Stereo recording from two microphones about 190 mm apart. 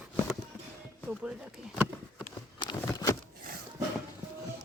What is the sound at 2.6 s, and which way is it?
Patter, 20° left (ahead or behind).